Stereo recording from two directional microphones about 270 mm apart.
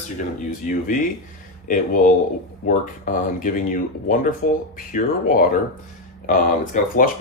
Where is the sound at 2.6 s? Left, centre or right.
Left.